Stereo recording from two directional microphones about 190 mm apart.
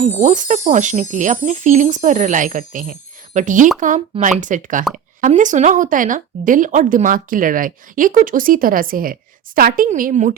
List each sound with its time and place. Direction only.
0.0 s speech: 40° right (ahead or behind)